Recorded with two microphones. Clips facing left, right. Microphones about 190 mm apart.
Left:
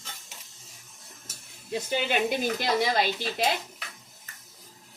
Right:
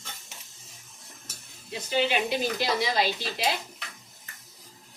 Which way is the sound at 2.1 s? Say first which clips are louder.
Left 1 dB; 50° left (ahead or behind).